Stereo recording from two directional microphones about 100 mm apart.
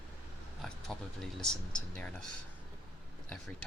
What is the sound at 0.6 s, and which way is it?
Vehicle, 5° left (ahead or behind).